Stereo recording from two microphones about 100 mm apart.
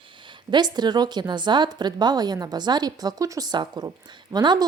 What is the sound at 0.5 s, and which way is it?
A woman's voice, 45° right (ahead or behind).